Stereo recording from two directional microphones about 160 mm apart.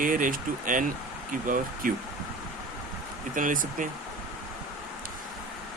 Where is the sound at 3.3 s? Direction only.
55° right (ahead or behind).